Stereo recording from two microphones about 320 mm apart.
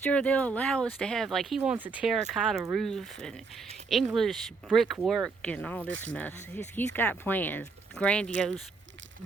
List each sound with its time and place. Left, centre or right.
0.0 s speech: centre
5.9 s speech: right
6.1 s speech: centre